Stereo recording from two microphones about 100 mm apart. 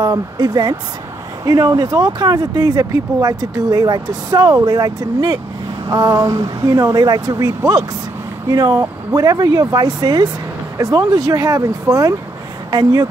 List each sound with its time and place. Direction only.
0.0 s speech: 45° right (ahead or behind)